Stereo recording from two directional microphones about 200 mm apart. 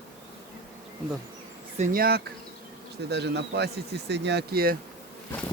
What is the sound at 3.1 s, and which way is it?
Speech, 55° right (ahead or behind).